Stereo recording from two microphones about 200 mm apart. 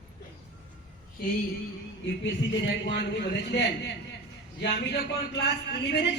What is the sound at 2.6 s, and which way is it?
A man's voice, 60° left (ahead or behind).